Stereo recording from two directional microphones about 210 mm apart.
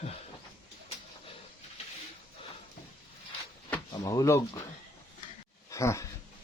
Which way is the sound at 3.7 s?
15° left (ahead or behind).